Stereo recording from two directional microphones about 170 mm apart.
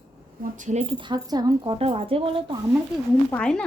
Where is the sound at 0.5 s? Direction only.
45° right (ahead or behind).